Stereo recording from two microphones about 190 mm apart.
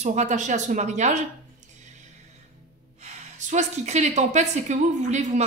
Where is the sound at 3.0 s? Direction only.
40° right (ahead or behind).